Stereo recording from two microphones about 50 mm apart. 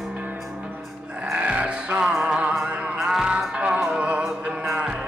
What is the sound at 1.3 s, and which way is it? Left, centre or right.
Music, right.